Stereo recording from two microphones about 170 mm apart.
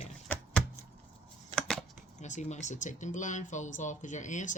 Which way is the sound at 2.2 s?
45° left (ahead or behind).